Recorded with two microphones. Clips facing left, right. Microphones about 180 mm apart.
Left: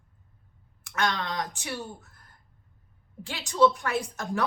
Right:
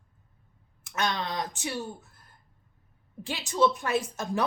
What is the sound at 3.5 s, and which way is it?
Speech, 20° right (ahead or behind).